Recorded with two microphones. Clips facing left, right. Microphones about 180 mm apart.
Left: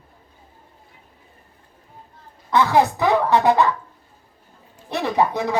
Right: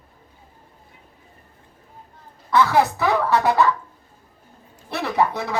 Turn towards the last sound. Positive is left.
turn(degrees=15)  # may be behind; listen again after turning